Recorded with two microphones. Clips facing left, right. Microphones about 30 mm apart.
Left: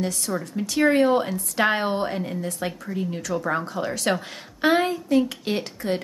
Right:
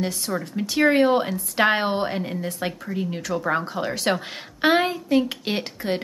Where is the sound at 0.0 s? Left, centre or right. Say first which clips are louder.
Even; centre.